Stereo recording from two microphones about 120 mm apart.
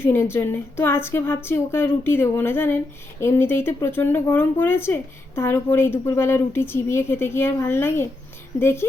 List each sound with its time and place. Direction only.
0.0 s speech: 20° left (ahead or behind)